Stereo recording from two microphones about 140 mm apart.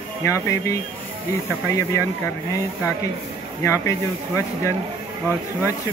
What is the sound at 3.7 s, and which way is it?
Speech, 20° left (ahead or behind).